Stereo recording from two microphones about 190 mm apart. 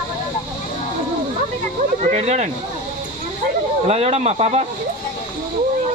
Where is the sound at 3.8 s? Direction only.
35° right (ahead or behind).